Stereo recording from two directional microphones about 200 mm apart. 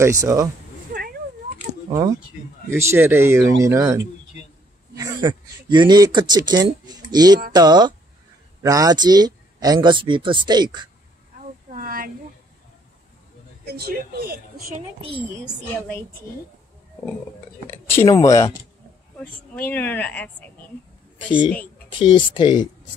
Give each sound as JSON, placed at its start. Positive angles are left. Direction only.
{"t": 0.0, "sound": "speech", "side_deg": -15}
{"t": 2.7, "sound": "a man's voice", "side_deg": -10}
{"t": 11.3, "sound": "a sound", "side_deg": -45}
{"t": 13.7, "sound": "speech", "side_deg": -50}
{"t": 15.0, "sound": "speech", "side_deg": -30}
{"t": 17.8, "sound": "speech", "side_deg": 15}
{"t": 19.5, "sound": "speech", "side_deg": 10}
{"t": 21.3, "sound": "speech", "side_deg": -5}
{"t": 21.9, "sound": "speech", "side_deg": 25}